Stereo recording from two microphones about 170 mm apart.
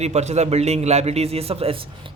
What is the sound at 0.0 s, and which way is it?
A man's voice, 40° right (ahead or behind).